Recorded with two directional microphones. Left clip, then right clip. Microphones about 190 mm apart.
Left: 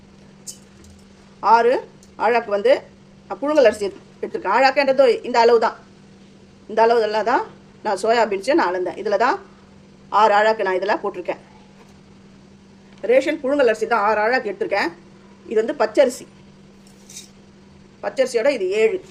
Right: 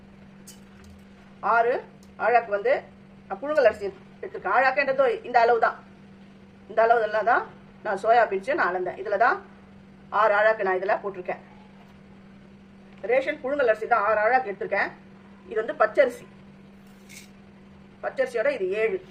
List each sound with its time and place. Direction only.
1.4 s a woman's voice: 45° left (ahead or behind)
6.7 s a woman's voice: 40° left (ahead or behind)
13.1 s a woman's voice: 45° left (ahead or behind)
15.4 s speech: 35° left (ahead or behind)
18.0 s speech: 40° left (ahead or behind)